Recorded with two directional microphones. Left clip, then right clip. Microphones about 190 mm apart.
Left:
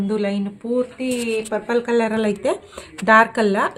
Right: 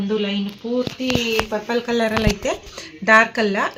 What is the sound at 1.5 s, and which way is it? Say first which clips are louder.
Speech: left 2 dB; 30° left (ahead or behind).